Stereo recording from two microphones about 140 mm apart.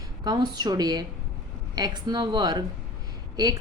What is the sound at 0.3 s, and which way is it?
A woman's voice, 30° right (ahead or behind).